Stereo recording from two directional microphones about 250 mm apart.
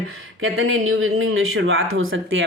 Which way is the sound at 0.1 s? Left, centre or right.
Right.